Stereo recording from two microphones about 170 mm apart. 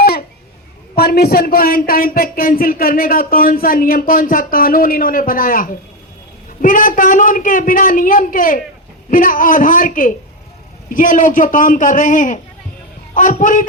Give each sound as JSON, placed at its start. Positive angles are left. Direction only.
{"t": 0.9, "sound": "a woman's voice", "side_deg": 65}